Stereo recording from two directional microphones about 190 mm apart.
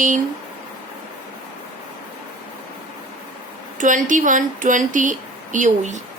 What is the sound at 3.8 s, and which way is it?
Speech, 45° right (ahead or behind).